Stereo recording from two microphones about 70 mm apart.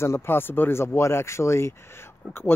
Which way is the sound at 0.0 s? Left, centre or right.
Left.